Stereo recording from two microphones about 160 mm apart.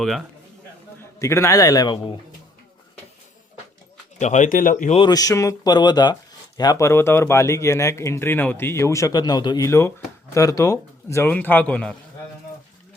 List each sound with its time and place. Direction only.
0.0 s a man's voice: centre (ahead or behind)
1.2 s speech: 20° left (ahead or behind)
4.2 s speech: 50° left (ahead or behind)
4.9 s speech: 25° left (ahead or behind); by 11.9 s 10° left (ahead or behind)